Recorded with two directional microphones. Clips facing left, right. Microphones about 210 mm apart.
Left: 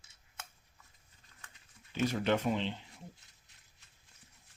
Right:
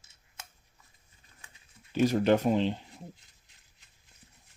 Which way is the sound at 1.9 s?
40° right (ahead or behind).